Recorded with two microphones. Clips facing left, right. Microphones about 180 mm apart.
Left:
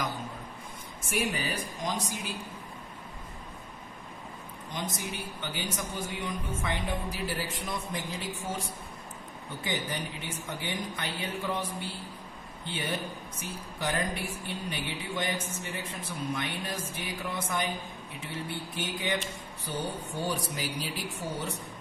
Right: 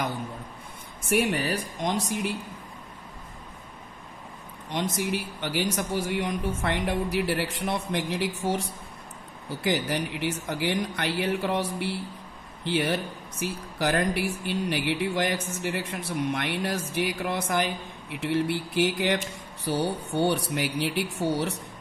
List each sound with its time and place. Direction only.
1.0 s speech: 65° right (ahead or behind)
4.6 s a man's voice: 70° right (ahead or behind)